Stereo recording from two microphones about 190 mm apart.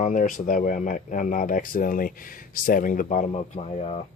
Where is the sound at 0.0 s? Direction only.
40° left (ahead or behind).